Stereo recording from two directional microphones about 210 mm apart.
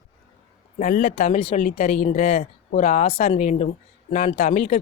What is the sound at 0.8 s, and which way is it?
Speech, 40° left (ahead or behind).